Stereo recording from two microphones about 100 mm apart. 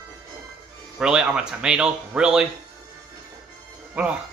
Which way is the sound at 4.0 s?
10° right (ahead or behind).